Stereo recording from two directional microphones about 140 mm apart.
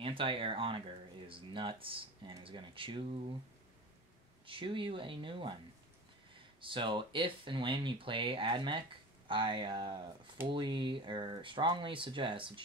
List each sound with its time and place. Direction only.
0.0 s speech: 40° right (ahead or behind)
4.5 s speech: 40° right (ahead or behind)
6.6 s speech: 35° right (ahead or behind)